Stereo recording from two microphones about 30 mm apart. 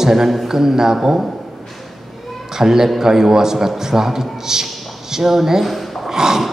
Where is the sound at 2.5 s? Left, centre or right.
Centre.